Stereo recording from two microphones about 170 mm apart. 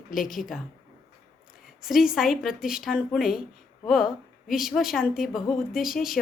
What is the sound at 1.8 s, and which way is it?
Speech, centre (ahead or behind).